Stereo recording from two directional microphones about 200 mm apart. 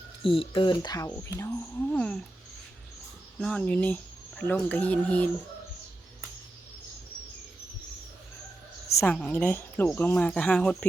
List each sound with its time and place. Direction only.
0.2 s speech: 25° left (ahead or behind); by 2.1 s 5° left (ahead or behind)
3.4 s speech: 5° left (ahead or behind)
8.9 s a sound: 15° left (ahead or behind)
9.1 s speech: 5° left (ahead or behind)